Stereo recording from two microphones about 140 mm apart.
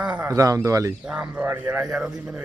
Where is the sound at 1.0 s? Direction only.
5° right (ahead or behind).